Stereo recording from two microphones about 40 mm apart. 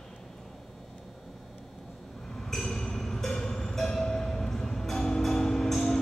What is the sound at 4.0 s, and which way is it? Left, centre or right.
Music, centre.